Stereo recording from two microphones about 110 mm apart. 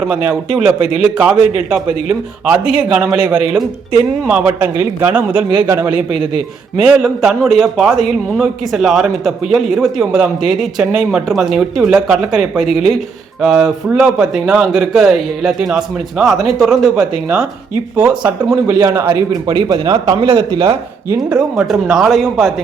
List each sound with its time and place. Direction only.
0.0 s a man's voice: 15° right (ahead or behind)
5.9 s a man's voice: 60° left (ahead or behind)
6.7 s a man's voice: 10° right (ahead or behind)
18.9 s a man's voice: 20° right (ahead or behind)
19.3 s speech: 40° right (ahead or behind)
20.1 s a man's voice: 55° right (ahead or behind)
21.2 s a man's voice: 10° right (ahead or behind)